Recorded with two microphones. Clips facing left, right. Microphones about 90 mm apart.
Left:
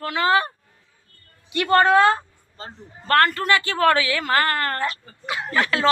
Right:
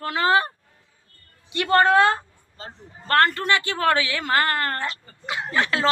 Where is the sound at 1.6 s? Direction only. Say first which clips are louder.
Left 1 dB; 25° right (ahead or behind).